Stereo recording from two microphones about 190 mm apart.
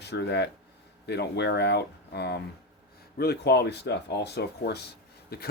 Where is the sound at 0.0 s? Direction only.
60° left (ahead or behind).